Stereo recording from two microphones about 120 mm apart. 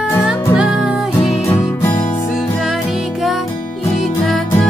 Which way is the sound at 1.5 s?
15° left (ahead or behind).